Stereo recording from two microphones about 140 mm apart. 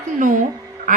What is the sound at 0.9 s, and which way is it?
Quack, 65° right (ahead or behind).